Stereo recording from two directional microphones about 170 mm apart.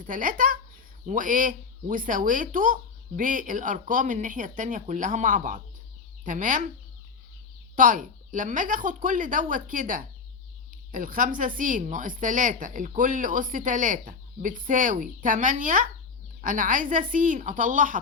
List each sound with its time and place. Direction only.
0.0 s speech: 50° right (ahead or behind)
7.8 s speech: 50° right (ahead or behind)